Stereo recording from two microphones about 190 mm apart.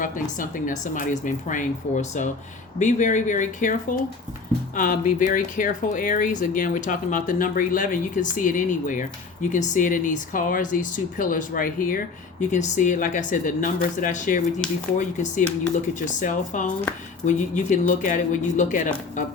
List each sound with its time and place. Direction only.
0.0 s speech: 45° left (ahead or behind)